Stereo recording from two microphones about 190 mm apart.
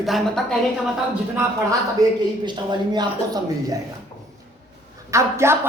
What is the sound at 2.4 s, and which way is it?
Speech, 25° right (ahead or behind).